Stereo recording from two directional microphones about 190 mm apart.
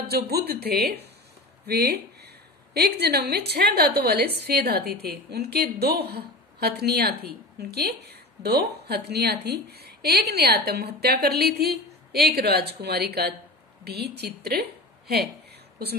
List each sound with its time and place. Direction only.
0.1 s a woman's voice: 55° right (ahead or behind)